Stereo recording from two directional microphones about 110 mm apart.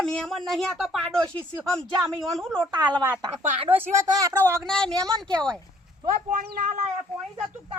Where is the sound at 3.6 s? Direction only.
60° right (ahead or behind).